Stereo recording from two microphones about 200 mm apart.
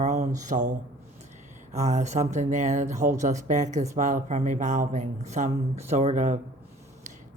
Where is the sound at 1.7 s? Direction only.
35° right (ahead or behind).